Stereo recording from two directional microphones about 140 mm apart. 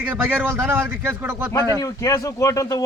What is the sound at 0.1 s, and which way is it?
Speech, 15° right (ahead or behind).